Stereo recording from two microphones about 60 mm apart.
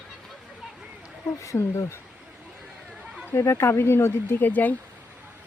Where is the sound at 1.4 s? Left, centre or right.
Left.